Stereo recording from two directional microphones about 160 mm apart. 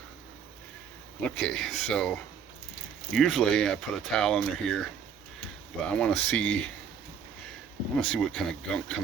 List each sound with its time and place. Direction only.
1.2 s speech: 5° left (ahead or behind)
7.9 s speech: 5° left (ahead or behind)